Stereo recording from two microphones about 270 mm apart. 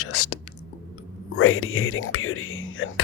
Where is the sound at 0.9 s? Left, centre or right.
Left.